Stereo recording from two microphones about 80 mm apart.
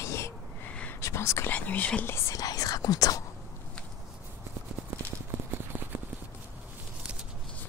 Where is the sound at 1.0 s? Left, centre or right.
Left.